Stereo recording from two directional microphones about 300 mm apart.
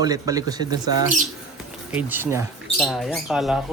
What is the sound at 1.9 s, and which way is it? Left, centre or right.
Speech, centre.